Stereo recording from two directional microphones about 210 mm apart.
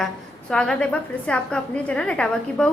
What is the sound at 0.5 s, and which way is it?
A woman's voice, 5° left (ahead or behind).